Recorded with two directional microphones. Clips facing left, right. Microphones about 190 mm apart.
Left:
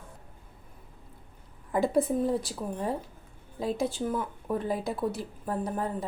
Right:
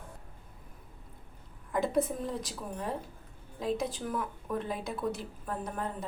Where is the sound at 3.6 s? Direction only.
30° left (ahead or behind).